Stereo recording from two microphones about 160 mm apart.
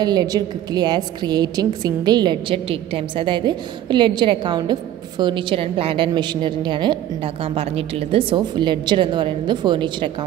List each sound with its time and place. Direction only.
0.0 s a woman's voice: 25° right (ahead or behind)